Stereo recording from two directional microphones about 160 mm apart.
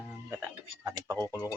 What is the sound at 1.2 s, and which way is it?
Speech, 20° left (ahead or behind).